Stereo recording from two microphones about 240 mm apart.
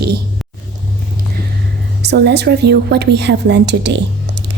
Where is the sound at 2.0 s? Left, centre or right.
Right.